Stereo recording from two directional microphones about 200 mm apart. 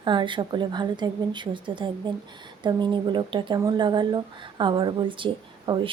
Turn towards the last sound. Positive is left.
turn(degrees=-25)  # may be behind; listen again after turning